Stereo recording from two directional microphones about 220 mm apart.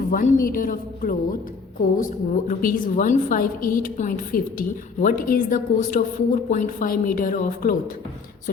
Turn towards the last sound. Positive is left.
turn(degrees=40)  # may be behind; listen again after turning